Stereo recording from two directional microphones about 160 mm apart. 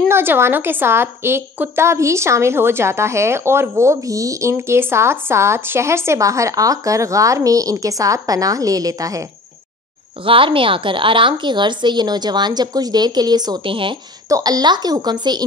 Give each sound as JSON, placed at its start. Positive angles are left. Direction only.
{"t": 0.1, "sound": "a woman's voice", "side_deg": -15}
{"t": 10.2, "sound": "speech", "side_deg": -35}